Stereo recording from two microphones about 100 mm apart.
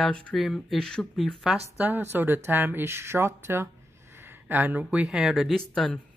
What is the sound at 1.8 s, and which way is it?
Speech, 20° right (ahead or behind).